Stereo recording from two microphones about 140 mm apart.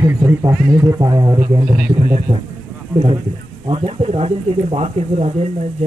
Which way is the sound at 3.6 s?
40° right (ahead or behind).